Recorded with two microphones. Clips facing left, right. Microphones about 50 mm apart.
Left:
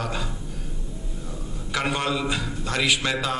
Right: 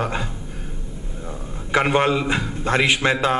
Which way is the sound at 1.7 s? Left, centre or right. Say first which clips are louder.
Right 7 dB; right.